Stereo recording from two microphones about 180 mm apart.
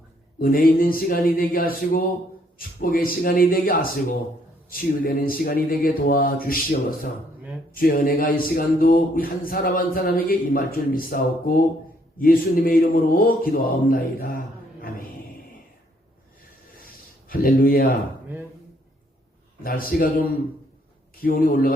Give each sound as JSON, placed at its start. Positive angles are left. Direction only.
{"t": 0.3, "sound": "speech", "side_deg": 55}
{"t": 16.8, "sound": "a sound", "side_deg": 55}
{"t": 19.6, "sound": "speech", "side_deg": 55}
{"t": 21.2, "sound": "speech", "side_deg": 50}